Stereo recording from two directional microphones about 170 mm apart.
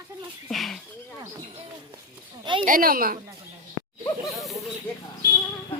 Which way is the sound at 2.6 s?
55° right (ahead or behind).